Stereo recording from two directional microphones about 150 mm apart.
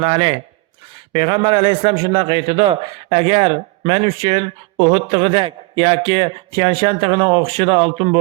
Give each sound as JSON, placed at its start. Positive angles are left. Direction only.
{"t": 0.0, "sound": "a man's voice", "side_deg": -35}